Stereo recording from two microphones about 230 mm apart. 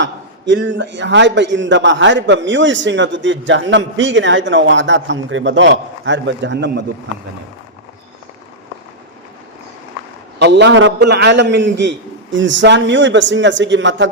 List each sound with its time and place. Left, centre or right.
0.0 s a man's voice: right
10.3 s a man's voice: right